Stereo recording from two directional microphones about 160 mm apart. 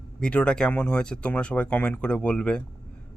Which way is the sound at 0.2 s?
5° left (ahead or behind).